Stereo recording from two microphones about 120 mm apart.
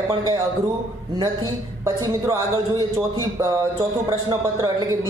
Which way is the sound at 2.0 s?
30° right (ahead or behind).